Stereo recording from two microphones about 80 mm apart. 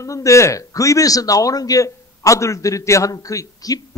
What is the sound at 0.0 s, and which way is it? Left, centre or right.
A man's voice, left.